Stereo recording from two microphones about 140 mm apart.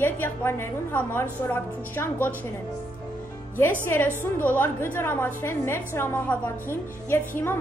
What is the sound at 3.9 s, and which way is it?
A woman's voice, 15° left (ahead or behind).